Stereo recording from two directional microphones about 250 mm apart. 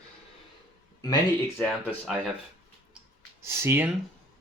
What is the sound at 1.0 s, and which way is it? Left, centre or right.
Speech, centre.